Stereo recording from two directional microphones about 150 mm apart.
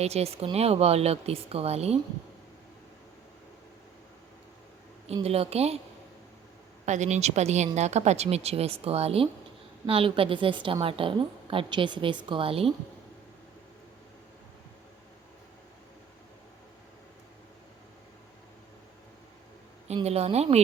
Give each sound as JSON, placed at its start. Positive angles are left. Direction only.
{"t": 0.0, "sound": "speech", "side_deg": -45}
{"t": 5.0, "sound": "speech", "side_deg": -40}
{"t": 6.8, "sound": "a woman's voice", "side_deg": -50}
{"t": 19.9, "sound": "speech", "side_deg": -45}